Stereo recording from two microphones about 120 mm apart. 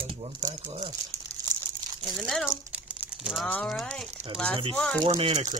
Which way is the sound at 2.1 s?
5° left (ahead or behind).